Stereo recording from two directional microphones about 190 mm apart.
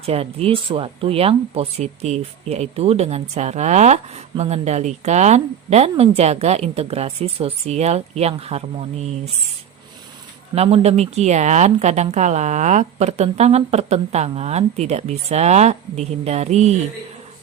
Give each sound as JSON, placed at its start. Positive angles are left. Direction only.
{"t": 0.0, "sound": "speech", "side_deg": -30}
{"t": 10.5, "sound": "speech", "side_deg": -35}